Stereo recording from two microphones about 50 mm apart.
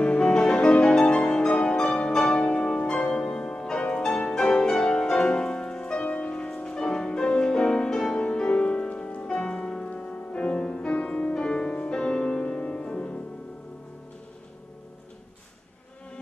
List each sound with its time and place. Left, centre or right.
0.0 s music: centre